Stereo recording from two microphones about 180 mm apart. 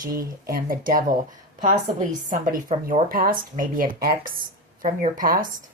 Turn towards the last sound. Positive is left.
turn(degrees=-50)  # may be behind; listen again after turning